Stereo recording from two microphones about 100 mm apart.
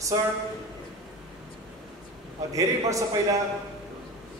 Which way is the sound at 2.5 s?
35° right (ahead or behind).